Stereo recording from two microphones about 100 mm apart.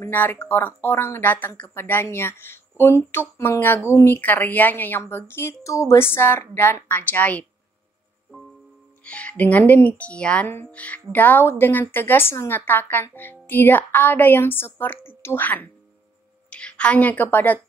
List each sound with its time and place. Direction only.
0.1 s speech: 20° left (ahead or behind)
9.0 s a woman's voice: 15° left (ahead or behind)